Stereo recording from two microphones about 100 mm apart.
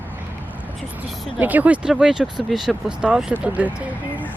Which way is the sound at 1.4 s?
15° right (ahead or behind).